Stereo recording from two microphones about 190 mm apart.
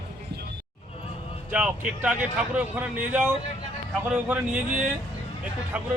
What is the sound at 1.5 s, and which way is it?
Speech, 5° right (ahead or behind).